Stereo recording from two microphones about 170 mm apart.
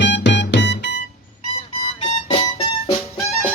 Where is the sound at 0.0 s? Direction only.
90° left.